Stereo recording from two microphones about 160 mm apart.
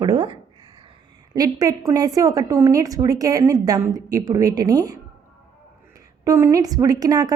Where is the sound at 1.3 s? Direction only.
25° right (ahead or behind).